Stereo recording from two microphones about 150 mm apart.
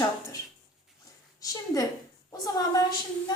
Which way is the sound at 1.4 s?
25° left (ahead or behind).